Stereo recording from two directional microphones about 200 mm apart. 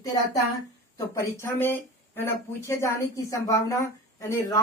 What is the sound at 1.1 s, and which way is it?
A woman's voice, 15° left (ahead or behind).